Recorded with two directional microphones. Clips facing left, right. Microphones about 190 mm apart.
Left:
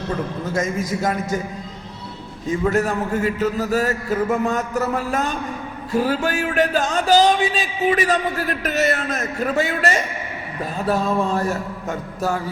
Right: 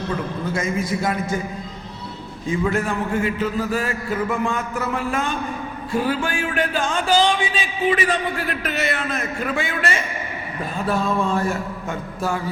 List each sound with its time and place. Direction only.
0.5 s a man's voice: 40° left (ahead or behind)
2.5 s a man's voice: 40° left (ahead or behind)